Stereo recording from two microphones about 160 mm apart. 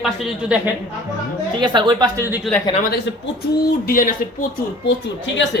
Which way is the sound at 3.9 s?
60° left (ahead or behind).